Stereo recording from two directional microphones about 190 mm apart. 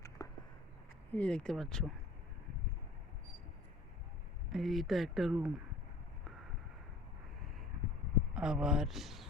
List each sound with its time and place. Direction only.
0.2 s a sound: 20° left (ahead or behind)
1.1 s speech: 5° left (ahead or behind)
4.5 s speech: centre (ahead or behind)
8.3 s speech: 5° right (ahead or behind)